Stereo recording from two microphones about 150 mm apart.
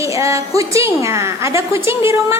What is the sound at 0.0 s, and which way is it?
A woman's voice, 20° right (ahead or behind).